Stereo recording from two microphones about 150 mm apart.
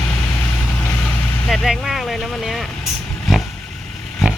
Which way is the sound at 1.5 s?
Centre (ahead or behind).